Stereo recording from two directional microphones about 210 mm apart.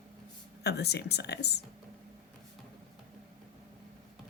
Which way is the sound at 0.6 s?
50° left (ahead or behind).